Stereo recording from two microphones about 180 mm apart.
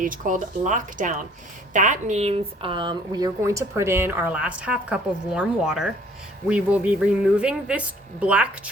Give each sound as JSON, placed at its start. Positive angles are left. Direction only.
{"t": 0.0, "sound": "speech", "side_deg": -50}